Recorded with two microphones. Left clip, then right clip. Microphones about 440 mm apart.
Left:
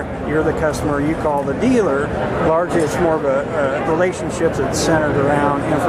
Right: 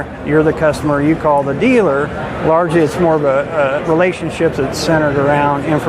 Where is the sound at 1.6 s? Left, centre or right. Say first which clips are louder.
Right 3 dB; right.